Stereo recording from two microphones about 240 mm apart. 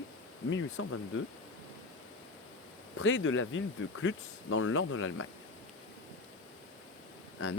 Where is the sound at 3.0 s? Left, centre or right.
Left.